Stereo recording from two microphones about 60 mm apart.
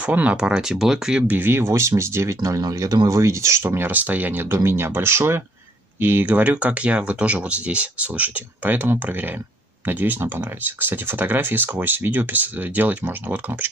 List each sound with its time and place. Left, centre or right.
0.0 s speech: right
1.2 s speech: right
2.4 s speech: right
3.9 s speech: right
6.5 s speech: right